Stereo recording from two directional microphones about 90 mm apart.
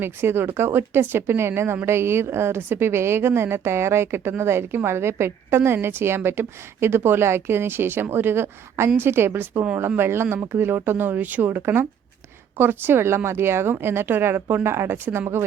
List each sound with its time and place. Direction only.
0.0 s speech: 25° right (ahead or behind)